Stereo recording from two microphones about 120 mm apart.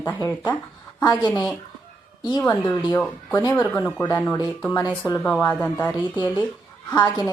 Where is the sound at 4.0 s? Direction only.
25° left (ahead or behind).